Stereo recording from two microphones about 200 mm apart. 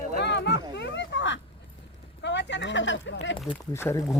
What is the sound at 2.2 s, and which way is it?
Speech, 60° left (ahead or behind).